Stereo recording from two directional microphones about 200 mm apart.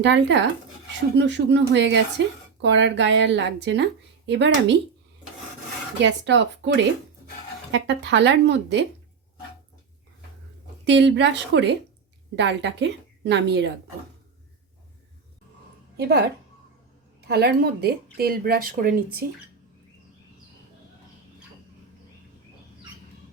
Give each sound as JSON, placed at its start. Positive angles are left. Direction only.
{"t": 0.0, "sound": "a woman's voice", "side_deg": -65}
{"t": 6.0, "sound": "a woman's voice", "side_deg": -60}
{"t": 10.8, "sound": "a woman's voice", "side_deg": -60}
{"t": 16.0, "sound": "speech", "side_deg": -55}